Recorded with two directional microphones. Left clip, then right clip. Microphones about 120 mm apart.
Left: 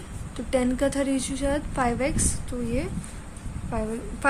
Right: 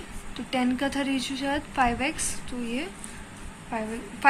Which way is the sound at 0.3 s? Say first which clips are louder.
Left 3 dB; 90° left.